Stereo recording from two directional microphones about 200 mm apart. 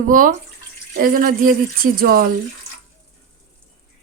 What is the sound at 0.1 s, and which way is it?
A woman's voice, 40° right (ahead or behind).